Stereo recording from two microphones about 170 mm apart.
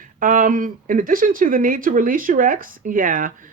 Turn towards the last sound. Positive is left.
turn(degrees=-50)  # may be behind; listen again after turning